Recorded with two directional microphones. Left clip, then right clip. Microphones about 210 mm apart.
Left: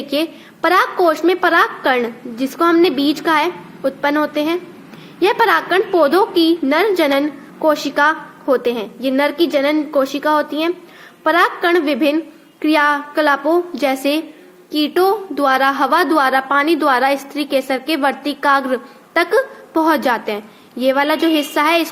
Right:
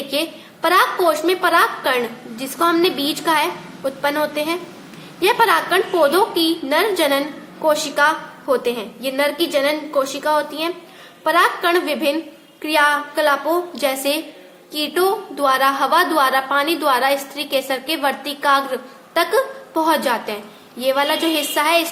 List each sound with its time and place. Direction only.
0.1 s a woman's voice: 30° left (ahead or behind)